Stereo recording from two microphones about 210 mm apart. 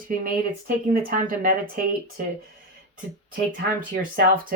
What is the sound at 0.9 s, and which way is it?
Speech, 40° right (ahead or behind).